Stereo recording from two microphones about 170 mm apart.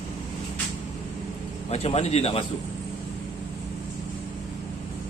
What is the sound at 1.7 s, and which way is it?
Speech, 35° left (ahead or behind).